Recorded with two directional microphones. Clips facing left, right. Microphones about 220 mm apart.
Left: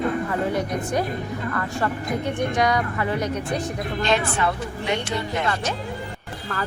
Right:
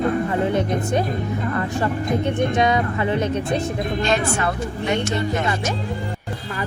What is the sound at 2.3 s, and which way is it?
A woman's voice, 25° right (ahead or behind).